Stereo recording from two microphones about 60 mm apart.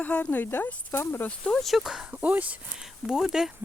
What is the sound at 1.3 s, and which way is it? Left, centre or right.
Speech, centre.